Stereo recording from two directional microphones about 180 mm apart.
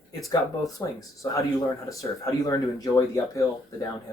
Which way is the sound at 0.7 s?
20° left (ahead or behind).